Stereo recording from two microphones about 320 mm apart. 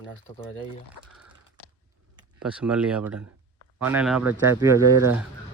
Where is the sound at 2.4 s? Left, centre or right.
Centre.